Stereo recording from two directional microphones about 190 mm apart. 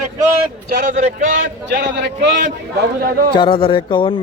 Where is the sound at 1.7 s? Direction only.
65° right (ahead or behind).